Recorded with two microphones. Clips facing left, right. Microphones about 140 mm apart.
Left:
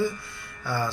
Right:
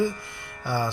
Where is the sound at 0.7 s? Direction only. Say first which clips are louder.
Right 2 dB; 20° right (ahead or behind).